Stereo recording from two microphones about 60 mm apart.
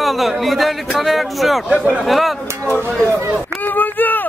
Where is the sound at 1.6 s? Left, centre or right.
Centre.